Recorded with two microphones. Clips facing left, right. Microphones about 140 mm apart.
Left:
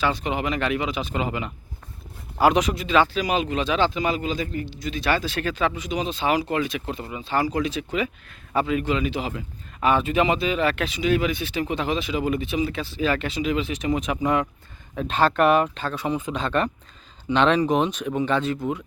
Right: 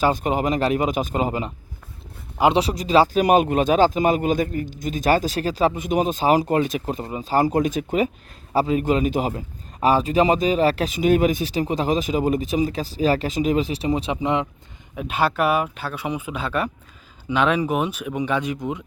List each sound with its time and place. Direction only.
0.0 s a man's voice: 45° right (ahead or behind)
3.2 s a man's voice: 50° right (ahead or behind); by 14.4 s 20° right (ahead or behind)
14.9 s speech: 10° right (ahead or behind)